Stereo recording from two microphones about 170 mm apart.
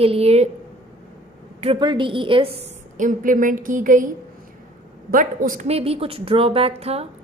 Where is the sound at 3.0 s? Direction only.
50° right (ahead or behind).